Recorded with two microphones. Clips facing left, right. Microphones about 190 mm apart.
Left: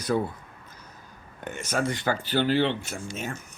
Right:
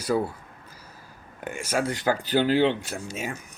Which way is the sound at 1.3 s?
10° right (ahead or behind).